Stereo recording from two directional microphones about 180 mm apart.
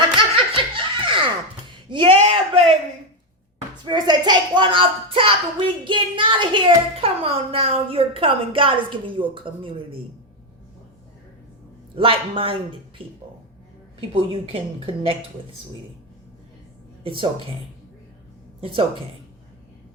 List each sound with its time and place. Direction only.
0.2 s laughter: 30° right (ahead or behind)
1.9 s a sound: 30° right (ahead or behind)
3.8 s a child's voice: 25° right (ahead or behind)
11.9 s a child's voice: 30° right (ahead or behind)
17.0 s speech: 30° right (ahead or behind)
18.6 s a child's voice: 30° right (ahead or behind)